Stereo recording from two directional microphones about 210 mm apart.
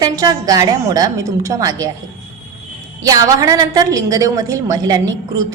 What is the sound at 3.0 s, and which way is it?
A woman's voice, 15° right (ahead or behind).